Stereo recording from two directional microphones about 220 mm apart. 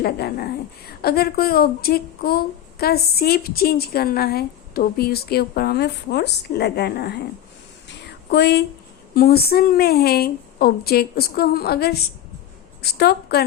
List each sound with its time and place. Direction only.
0.0 s a woman's voice: 45° left (ahead or behind)
7.9 s a sound: 50° left (ahead or behind)
9.1 s a woman's voice: 45° left (ahead or behind)